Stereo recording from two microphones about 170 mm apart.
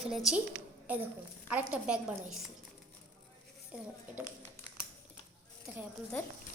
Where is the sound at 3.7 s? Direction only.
10° right (ahead or behind).